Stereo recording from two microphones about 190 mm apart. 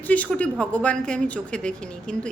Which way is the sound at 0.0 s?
10° left (ahead or behind).